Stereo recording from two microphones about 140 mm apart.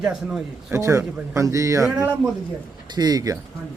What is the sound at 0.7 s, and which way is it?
Speech, 20° right (ahead or behind).